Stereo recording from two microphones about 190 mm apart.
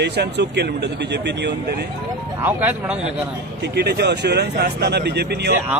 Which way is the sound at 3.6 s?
60° right (ahead or behind).